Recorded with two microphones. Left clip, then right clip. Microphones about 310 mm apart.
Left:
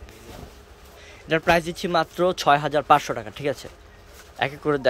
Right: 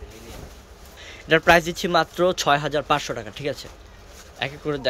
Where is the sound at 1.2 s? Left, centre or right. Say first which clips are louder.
Right 4 dB; centre.